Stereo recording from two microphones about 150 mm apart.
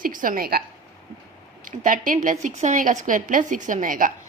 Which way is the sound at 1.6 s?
65° right (ahead or behind).